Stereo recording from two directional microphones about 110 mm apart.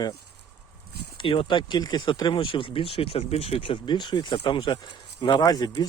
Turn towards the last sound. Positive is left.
turn(degrees=35)  # may be behind; listen again after turning